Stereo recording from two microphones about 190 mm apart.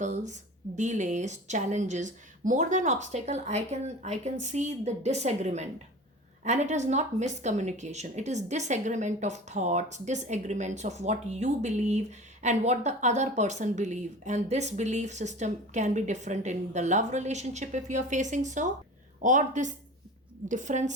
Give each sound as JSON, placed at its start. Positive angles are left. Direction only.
{"t": 0.0, "sound": "speech", "side_deg": -40}